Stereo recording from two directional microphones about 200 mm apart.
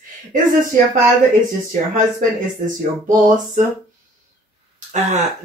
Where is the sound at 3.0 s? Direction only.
40° right (ahead or behind).